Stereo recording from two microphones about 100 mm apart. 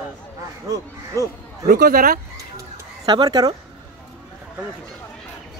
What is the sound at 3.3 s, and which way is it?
Speech, 40° right (ahead or behind).